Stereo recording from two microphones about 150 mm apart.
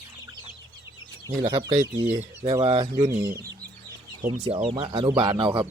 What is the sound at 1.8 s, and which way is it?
Speech, 15° right (ahead or behind).